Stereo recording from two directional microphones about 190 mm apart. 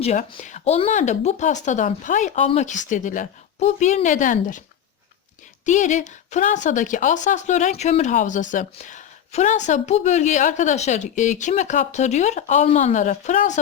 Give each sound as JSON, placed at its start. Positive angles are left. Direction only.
{"t": 0.0, "sound": "speech", "side_deg": 40}
{"t": 5.6, "sound": "speech", "side_deg": 40}